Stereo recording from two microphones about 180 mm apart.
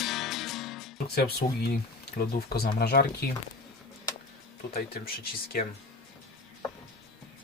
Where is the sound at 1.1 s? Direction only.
60° left (ahead or behind).